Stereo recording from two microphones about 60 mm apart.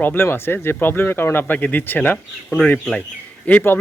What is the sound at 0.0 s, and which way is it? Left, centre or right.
Speech, left.